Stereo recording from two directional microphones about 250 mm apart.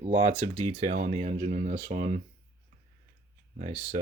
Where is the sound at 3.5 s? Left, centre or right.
Right.